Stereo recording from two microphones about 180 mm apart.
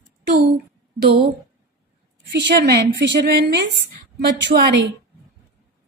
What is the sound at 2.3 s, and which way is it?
A woman's voice, 70° right (ahead or behind).